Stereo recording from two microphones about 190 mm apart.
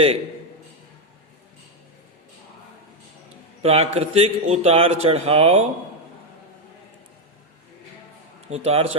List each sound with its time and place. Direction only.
3.6 s a man's voice: 35° right (ahead or behind)
8.4 s a man's voice: 35° right (ahead or behind)